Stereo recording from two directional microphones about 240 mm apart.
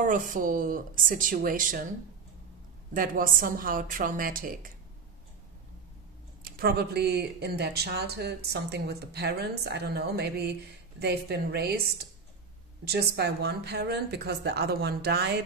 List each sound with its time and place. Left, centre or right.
0.0 s a woman's voice: right
2.9 s a woman's voice: right
6.4 s a woman's voice: right